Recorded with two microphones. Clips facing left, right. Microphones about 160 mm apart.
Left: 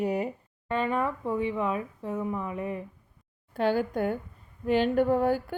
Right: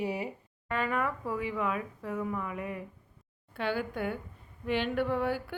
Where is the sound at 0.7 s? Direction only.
25° left (ahead or behind).